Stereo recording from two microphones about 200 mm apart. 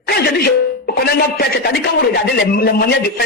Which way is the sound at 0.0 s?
50° left (ahead or behind).